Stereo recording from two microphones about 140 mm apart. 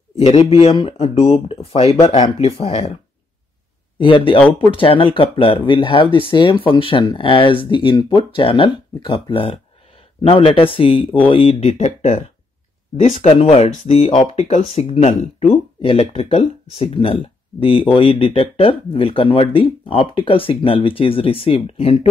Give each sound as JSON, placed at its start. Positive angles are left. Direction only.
{"t": 0.1, "sound": "speech", "side_deg": 45}
{"t": 4.0, "sound": "speech", "side_deg": 40}